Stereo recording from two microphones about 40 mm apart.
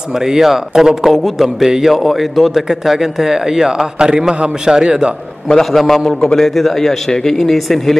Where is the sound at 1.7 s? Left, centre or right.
Centre.